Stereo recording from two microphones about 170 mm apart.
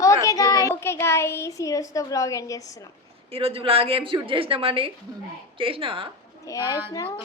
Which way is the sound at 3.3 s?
35° right (ahead or behind).